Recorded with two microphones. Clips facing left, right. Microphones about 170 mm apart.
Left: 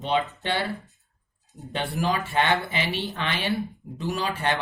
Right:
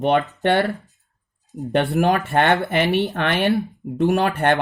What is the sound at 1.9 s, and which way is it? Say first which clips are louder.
Speech: right 4 dB; 60° right (ahead or behind).